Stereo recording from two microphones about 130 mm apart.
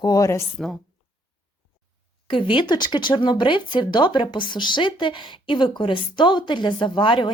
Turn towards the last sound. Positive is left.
turn(degrees=40)  # may be behind; listen again after turning